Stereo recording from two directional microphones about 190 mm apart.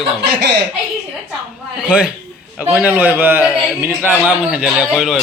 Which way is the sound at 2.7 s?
10° right (ahead or behind).